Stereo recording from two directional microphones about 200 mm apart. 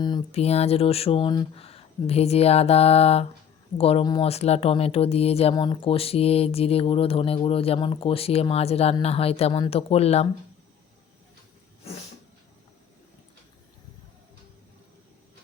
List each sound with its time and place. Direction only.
0.0 s speech: 20° left (ahead or behind)